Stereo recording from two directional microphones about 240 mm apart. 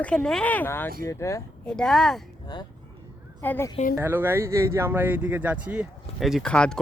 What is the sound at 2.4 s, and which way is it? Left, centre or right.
A woman's voice, centre.